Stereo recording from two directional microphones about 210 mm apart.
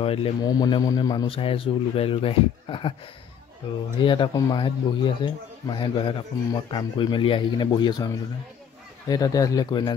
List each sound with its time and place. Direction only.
0.0 s a man's voice: 25° left (ahead or behind)
4.0 s a man's voice: 25° left (ahead or behind)